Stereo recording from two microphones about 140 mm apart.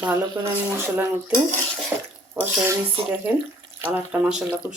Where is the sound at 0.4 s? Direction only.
15° right (ahead or behind).